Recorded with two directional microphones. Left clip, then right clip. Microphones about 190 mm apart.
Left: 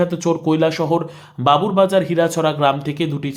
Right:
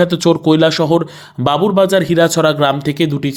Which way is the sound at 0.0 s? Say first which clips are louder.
Right 6 dB; 25° right (ahead or behind).